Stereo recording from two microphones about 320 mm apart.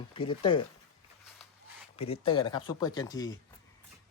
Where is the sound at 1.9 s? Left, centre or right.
Centre.